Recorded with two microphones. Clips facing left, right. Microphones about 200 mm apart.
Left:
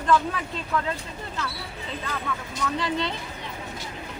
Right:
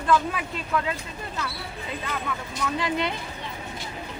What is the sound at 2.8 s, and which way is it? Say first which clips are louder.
Speech: right 2 dB; 10° right (ahead or behind).